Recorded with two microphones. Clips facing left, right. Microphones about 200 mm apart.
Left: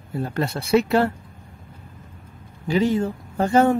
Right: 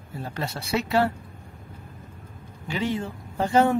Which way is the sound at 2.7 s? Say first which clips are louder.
Left 7 dB; 40° left (ahead or behind).